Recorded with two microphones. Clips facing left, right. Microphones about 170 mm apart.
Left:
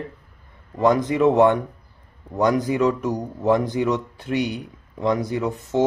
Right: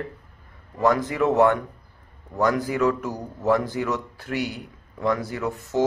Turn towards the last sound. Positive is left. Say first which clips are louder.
# left 3 dB
turn(degrees=20)  # may be behind; listen again after turning